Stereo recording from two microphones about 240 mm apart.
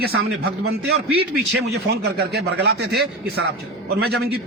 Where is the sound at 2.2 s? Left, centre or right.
Right.